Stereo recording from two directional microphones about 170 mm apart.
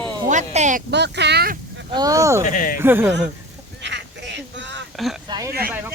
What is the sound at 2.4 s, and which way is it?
Speech, 50° left (ahead or behind).